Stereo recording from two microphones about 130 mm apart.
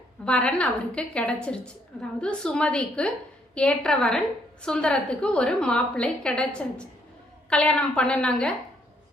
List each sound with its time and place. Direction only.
0.3 s a woman's voice: 10° left (ahead or behind)